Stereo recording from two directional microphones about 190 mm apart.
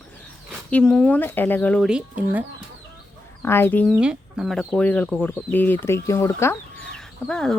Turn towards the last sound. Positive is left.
turn(degrees=5)  # may be behind; listen again after turning